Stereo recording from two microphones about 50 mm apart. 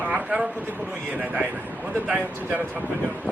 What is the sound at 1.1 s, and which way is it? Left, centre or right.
Speech, right.